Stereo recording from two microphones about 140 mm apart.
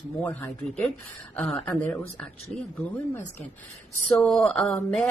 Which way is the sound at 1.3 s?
10° left (ahead or behind).